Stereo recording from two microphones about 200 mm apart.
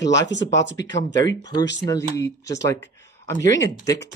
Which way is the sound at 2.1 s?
15° left (ahead or behind).